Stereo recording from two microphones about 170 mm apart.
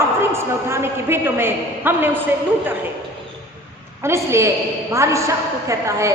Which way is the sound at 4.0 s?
15° right (ahead or behind).